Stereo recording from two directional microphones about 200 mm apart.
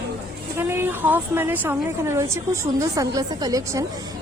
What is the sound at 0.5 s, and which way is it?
A woman's voice, 10° right (ahead or behind).